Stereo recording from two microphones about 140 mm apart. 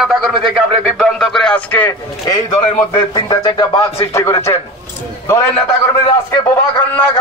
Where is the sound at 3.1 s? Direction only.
35° left (ahead or behind).